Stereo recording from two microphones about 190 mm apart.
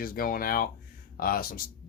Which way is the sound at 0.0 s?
50° left (ahead or behind).